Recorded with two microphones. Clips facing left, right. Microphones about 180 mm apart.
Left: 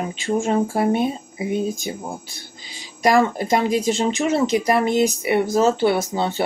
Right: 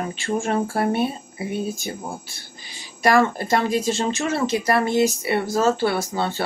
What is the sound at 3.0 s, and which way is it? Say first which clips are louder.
Speech: left 1 dB; 15° left (ahead or behind).